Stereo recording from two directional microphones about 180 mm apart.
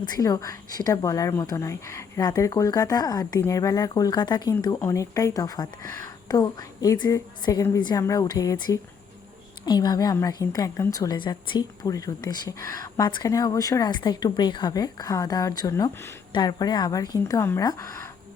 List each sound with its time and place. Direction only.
0.0 s a woman's voice: 20° left (ahead or behind)